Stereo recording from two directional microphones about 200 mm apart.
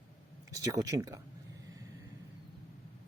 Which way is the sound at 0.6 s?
15° right (ahead or behind).